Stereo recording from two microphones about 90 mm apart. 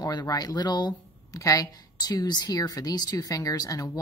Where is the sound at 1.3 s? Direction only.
40° left (ahead or behind).